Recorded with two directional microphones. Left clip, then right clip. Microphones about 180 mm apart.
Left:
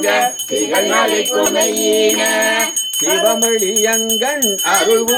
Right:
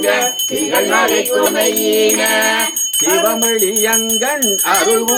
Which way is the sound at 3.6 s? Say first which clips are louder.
Even; 15° left (ahead or behind).